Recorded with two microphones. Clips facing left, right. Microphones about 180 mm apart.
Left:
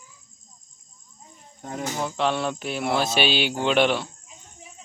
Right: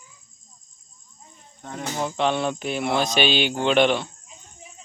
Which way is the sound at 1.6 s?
10° left (ahead or behind).